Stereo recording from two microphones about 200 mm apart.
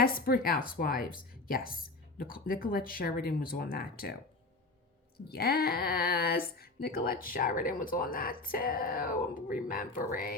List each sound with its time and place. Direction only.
0.0 s speech: 45° left (ahead or behind)